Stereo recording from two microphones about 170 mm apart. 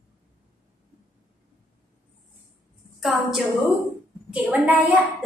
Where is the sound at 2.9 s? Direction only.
Centre (ahead or behind).